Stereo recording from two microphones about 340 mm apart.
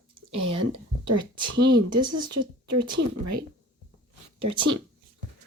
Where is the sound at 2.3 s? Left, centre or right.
Right.